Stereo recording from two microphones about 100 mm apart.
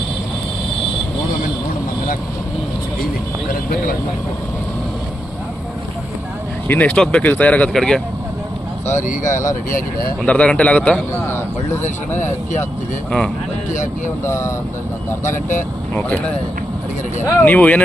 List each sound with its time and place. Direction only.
6.7 s speech: 15° left (ahead or behind)
7.7 s speech: 5° left (ahead or behind)
10.2 s speech: 10° left (ahead or behind)
13.1 s speech: 10° left (ahead or behind)
14.3 s speech: 30° left (ahead or behind)
16.0 s speech: 15° left (ahead or behind)